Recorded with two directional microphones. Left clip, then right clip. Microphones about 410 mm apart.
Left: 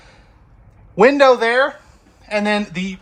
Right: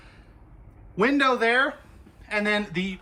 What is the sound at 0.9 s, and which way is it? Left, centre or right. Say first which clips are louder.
Speech: left 10 dB; centre.